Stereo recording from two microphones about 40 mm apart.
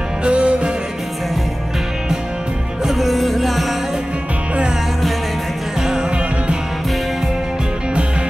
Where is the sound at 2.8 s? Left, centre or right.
Centre.